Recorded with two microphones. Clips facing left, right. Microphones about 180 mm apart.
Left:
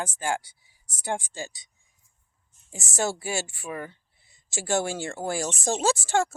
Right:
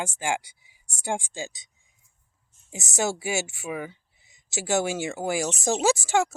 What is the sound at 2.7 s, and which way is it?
Speech, 15° right (ahead or behind).